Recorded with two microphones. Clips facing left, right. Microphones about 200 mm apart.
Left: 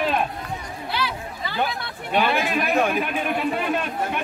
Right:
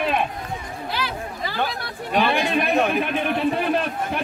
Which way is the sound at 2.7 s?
Centre (ahead or behind).